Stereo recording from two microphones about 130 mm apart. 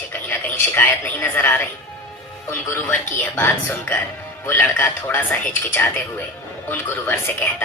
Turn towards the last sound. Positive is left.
turn(degrees=15)  # may be behind; listen again after turning